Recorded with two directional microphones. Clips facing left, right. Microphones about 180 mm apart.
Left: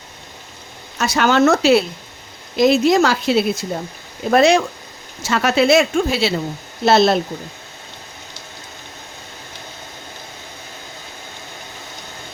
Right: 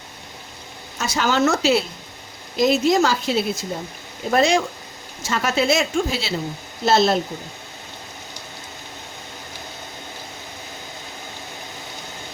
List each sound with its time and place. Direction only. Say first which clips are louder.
0.9 s a woman's voice: left 5 dB; 65° left (ahead or behind)